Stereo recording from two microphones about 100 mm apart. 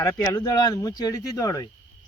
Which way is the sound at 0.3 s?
40° left (ahead or behind).